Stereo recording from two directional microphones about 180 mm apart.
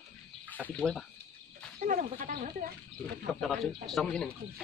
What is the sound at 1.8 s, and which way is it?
Speech, 50° right (ahead or behind).